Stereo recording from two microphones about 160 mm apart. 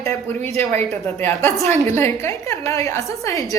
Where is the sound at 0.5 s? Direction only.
40° right (ahead or behind).